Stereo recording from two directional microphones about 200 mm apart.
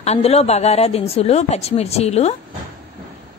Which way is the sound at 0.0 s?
30° left (ahead or behind).